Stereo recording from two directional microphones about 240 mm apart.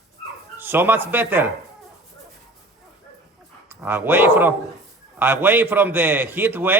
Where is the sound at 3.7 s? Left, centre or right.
Centre.